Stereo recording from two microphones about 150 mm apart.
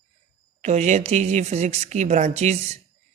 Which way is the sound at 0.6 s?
50° right (ahead or behind).